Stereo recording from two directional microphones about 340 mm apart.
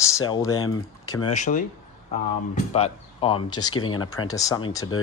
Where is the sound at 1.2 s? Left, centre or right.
Left.